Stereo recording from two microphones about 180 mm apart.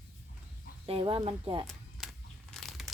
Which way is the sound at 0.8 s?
30° right (ahead or behind).